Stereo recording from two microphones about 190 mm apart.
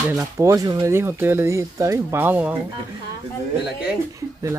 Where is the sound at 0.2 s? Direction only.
15° right (ahead or behind).